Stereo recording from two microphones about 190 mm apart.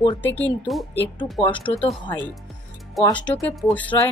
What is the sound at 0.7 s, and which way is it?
Speech, centre (ahead or behind).